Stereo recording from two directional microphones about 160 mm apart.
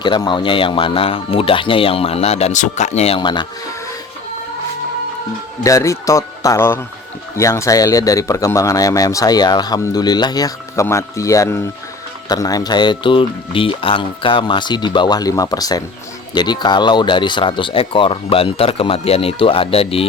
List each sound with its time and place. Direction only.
0.0 s speech: 30° left (ahead or behind)
3.2 s speech: 30° left (ahead or behind)
5.6 s speech: 20° left (ahead or behind); by 20.1 s 35° left (ahead or behind)